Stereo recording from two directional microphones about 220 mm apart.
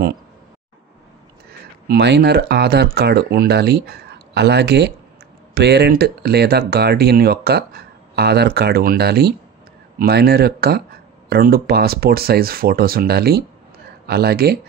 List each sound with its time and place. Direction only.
1.9 s speech: 50° right (ahead or behind)